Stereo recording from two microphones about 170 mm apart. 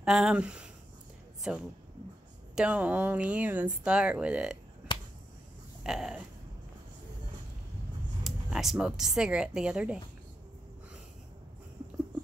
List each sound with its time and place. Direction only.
0.0 s speech: 5° right (ahead or behind)
4.9 s finger snapping: 30° left (ahead or behind)
5.9 s speech: 5° right (ahead or behind)
8.2 s speech: centre (ahead or behind)